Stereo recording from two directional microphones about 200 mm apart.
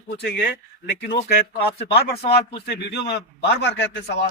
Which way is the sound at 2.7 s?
60° left (ahead or behind).